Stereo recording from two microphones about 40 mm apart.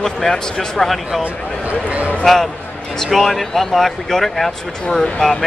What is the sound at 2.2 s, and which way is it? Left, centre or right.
Speech, centre.